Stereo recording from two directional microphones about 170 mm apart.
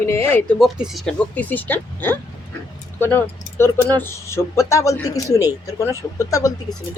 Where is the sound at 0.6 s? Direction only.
Centre (ahead or behind).